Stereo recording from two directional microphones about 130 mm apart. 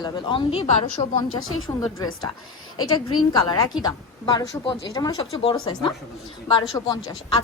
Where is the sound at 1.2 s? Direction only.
30° left (ahead or behind).